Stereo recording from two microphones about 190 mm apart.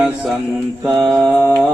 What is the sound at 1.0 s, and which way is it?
Mantra, centre (ahead or behind).